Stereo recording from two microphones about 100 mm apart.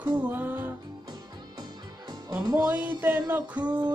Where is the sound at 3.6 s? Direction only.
45° right (ahead or behind).